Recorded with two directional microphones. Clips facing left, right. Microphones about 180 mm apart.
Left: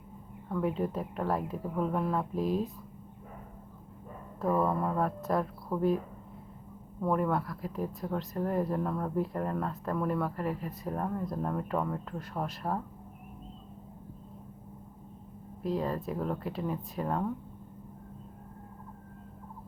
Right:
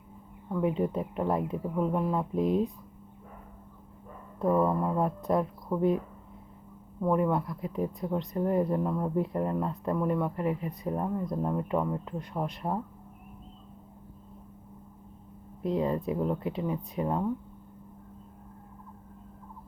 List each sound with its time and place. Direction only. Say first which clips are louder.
0.4 s speech: right 3 dB; 15° right (ahead or behind)
1.8 s a sound: right 2 dB; 15° right (ahead or behind)
4.7 s a sound: right 2 dB; 10° right (ahead or behind)
5.3 s speech: right 3 dB; 15° right (ahead or behind)
7.0 s speech: right 3 dB; 15° right (ahead or behind)
15.6 s speech: right 4 dB; 20° right (ahead or behind)